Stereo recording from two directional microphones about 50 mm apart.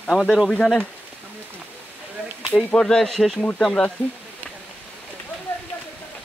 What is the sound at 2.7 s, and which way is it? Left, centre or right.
Speech, centre.